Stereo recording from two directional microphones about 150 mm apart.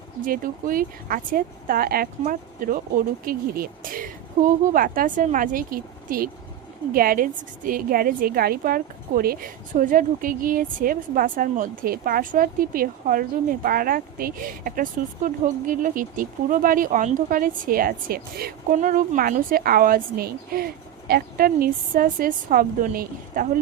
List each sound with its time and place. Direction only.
0.3 s a woman's voice: 70° right (ahead or behind)